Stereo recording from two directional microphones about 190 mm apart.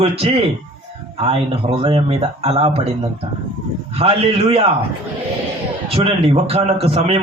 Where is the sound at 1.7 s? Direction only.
30° right (ahead or behind).